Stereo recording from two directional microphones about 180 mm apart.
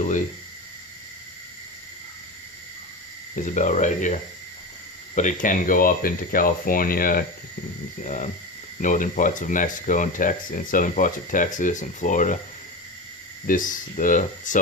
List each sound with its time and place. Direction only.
3.3 s speech: 45° left (ahead or behind)
13.5 s speech: 50° left (ahead or behind)